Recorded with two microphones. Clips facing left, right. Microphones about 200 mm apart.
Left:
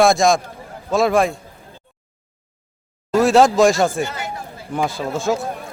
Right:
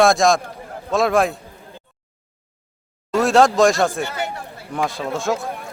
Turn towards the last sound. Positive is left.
turn(degrees=0)  # may be behind; listen again after turning